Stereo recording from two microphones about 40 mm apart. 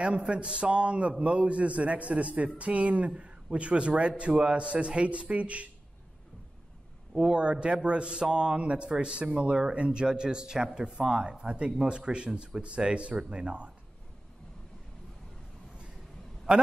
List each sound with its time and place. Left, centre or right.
0.0 s a man's voice: right
7.2 s a man's voice: right